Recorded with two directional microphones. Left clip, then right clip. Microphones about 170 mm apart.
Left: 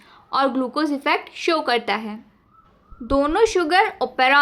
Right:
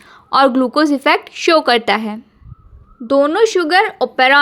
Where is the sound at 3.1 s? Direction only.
30° right (ahead or behind).